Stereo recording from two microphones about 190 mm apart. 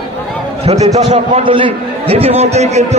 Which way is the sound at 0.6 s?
35° right (ahead or behind).